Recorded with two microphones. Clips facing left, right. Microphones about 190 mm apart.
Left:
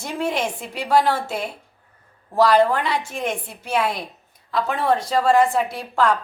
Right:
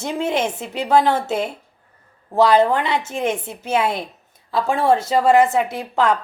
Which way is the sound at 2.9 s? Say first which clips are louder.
Right 3 dB; 25° right (ahead or behind).